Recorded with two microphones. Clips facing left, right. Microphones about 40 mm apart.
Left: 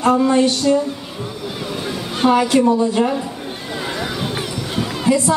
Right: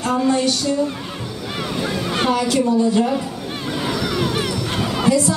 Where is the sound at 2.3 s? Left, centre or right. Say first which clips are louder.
Left 4 dB; left.